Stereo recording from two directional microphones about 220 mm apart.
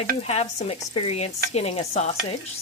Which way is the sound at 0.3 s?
30° left (ahead or behind).